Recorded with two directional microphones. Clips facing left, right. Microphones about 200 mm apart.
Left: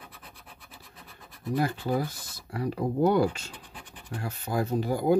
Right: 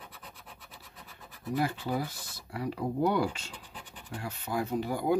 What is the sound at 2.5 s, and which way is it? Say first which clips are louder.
Speech: left 4 dB; 45° left (ahead or behind).